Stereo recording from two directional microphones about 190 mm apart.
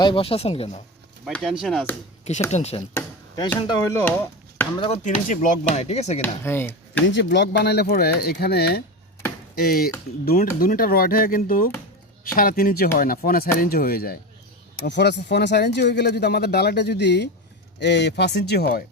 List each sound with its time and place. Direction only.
0.0 s speech: 25° left (ahead or behind)
1.2 s speech: centre (ahead or behind)
2.5 s speech: 35° left (ahead or behind)
2.9 s a sound: 20° left (ahead or behind)
3.6 s speech: 15° left (ahead or behind)
4.8 s speech: 30° left (ahead or behind)
5.3 s speech: 45° left (ahead or behind)
6.2 s speech: 10° left (ahead or behind)
7.1 s speech: 65° left (ahead or behind); by 14.2 s 50° left (ahead or behind)
14.8 s speech: 65° left (ahead or behind)